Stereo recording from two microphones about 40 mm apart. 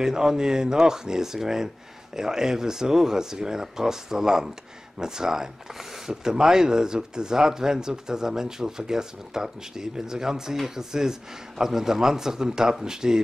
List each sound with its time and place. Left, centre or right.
0.0 s speech: centre